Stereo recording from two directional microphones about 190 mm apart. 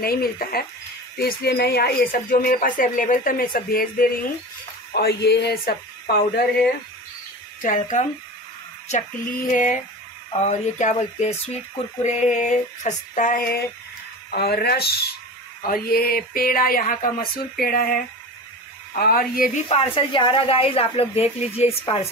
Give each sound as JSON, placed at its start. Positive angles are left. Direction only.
{"t": 0.0, "sound": "speech", "side_deg": 50}
{"t": 7.6, "sound": "a woman's voice", "side_deg": 40}
{"t": 19.7, "sound": "a woman's voice", "side_deg": 30}